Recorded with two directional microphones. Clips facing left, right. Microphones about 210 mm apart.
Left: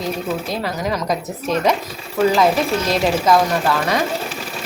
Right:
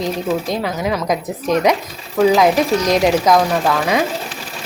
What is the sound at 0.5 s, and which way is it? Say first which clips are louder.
Speech: right 2 dB; 10° right (ahead or behind).